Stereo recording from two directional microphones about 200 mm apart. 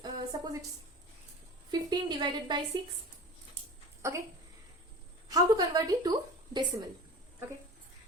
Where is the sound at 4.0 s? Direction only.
15° right (ahead or behind).